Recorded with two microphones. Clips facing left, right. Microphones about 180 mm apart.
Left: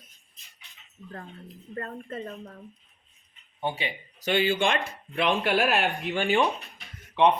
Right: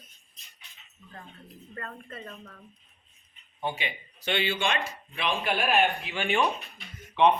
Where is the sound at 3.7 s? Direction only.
35° left (ahead or behind); by 6.1 s 80° left.